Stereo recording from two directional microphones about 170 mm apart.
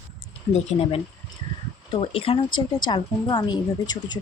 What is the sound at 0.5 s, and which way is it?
A woman's voice, 35° left (ahead or behind).